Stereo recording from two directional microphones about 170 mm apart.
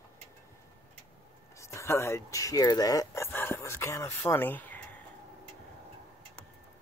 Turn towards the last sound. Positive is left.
turn(degrees=10)  # may be behind; listen again after turning